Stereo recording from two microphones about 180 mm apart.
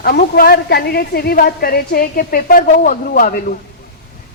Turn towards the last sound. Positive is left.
turn(degrees=50)  # may be behind; listen again after turning